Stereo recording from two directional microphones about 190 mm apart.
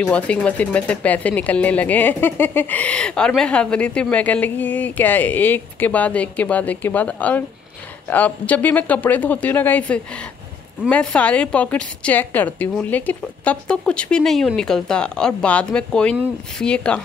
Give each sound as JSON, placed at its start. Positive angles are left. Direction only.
{"t": 0.0, "sound": "a woman's voice", "side_deg": 5}